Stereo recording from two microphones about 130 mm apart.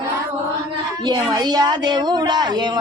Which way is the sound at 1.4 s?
35° right (ahead or behind).